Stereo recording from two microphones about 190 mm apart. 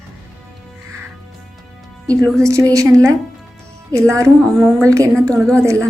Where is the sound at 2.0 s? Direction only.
15° right (ahead or behind).